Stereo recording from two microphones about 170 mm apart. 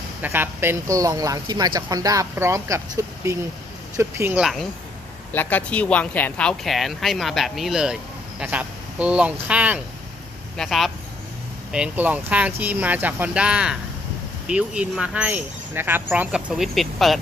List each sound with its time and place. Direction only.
0.2 s speech: 15° right (ahead or behind)
5.3 s speech: 10° left (ahead or behind)